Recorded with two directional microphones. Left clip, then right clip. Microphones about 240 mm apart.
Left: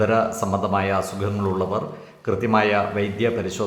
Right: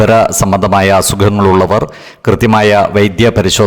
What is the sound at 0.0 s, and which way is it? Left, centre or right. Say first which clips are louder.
A man's voice: right 12 dB; right.